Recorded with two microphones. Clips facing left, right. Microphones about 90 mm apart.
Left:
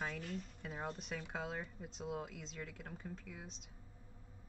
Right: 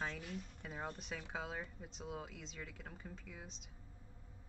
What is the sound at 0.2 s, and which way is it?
Speech, 5° right (ahead or behind).